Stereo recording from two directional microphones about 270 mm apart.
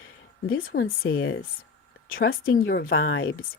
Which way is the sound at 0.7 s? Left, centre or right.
Left.